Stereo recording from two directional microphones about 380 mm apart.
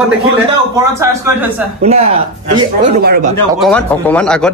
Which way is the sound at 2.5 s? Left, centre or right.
Right.